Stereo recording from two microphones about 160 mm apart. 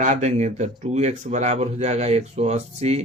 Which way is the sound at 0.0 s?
50° right (ahead or behind).